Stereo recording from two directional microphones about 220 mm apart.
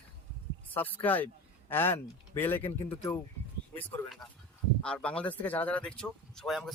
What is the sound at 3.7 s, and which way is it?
Speech, 5° left (ahead or behind).